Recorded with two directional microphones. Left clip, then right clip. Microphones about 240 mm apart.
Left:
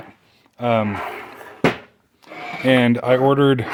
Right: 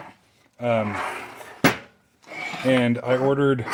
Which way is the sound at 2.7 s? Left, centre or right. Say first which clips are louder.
Left 5 dB; left.